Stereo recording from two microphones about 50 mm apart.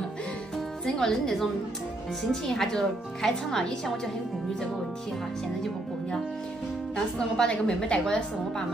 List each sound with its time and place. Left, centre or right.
0.8 s a woman's voice: centre
7.2 s a woman's voice: centre